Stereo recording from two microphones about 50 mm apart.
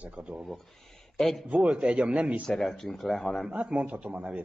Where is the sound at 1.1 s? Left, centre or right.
Centre.